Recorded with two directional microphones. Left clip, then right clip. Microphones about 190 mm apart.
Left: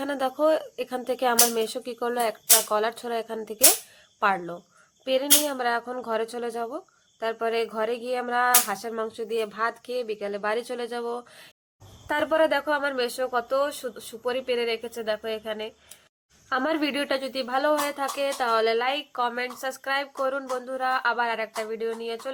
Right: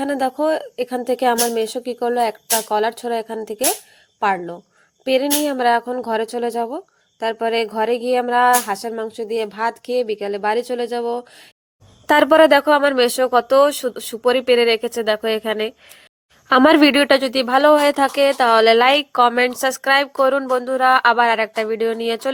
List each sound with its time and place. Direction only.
0.0 s speech: 25° right (ahead or behind)
12.0 s a woman's voice: 55° right (ahead or behind)